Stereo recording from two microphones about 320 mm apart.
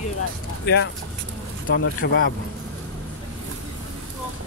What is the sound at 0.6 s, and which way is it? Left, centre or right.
Speech, left.